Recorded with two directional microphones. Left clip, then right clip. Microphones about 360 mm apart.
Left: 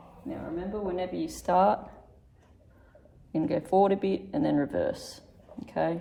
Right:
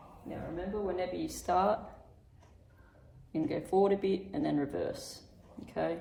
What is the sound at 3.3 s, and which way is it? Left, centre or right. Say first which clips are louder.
Speech: left 5 dB; left.